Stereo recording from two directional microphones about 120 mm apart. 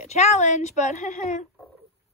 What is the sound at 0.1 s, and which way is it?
A woman's voice, 70° left (ahead or behind).